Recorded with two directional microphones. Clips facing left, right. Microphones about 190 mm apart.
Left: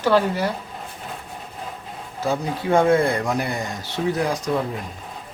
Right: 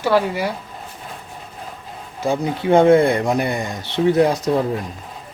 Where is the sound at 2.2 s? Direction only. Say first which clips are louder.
Right 4 dB; 20° right (ahead or behind).